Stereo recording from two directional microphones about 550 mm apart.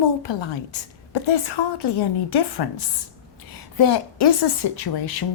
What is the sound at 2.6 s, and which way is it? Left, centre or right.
A woman's voice, left.